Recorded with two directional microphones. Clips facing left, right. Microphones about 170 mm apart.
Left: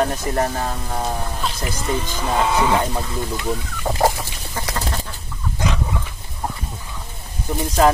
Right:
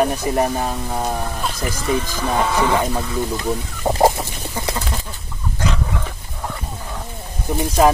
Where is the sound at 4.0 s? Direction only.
20° right (ahead or behind).